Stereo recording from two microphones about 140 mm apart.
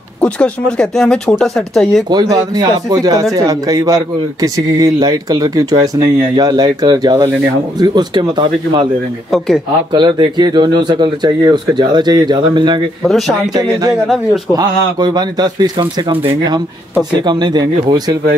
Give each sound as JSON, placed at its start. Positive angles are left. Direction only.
{"t": 0.2, "sound": "speech", "side_deg": 5}
{"t": 2.0, "sound": "speech", "side_deg": -30}
{"t": 9.9, "sound": "speech", "side_deg": -30}
{"t": 13.0, "sound": "speech", "side_deg": 0}
{"t": 14.5, "sound": "speech", "side_deg": -30}
{"t": 17.2, "sound": "speech", "side_deg": -30}